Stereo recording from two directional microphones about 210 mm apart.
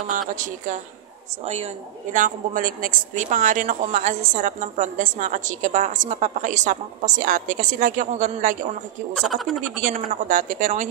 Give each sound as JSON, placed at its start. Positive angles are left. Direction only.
{"t": 0.3, "sound": "a woman's voice", "side_deg": -35}
{"t": 9.1, "sound": "speech", "side_deg": 0}
{"t": 9.8, "sound": "a woman's voice", "side_deg": -40}